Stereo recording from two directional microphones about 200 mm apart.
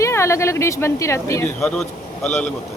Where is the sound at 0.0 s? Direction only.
15° left (ahead or behind).